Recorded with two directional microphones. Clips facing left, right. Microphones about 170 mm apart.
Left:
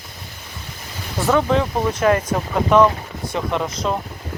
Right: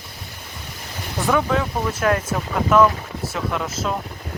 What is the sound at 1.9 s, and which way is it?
Speech, 5° right (ahead or behind).